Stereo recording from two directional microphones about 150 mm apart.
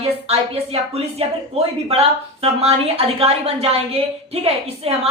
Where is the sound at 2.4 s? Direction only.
45° right (ahead or behind).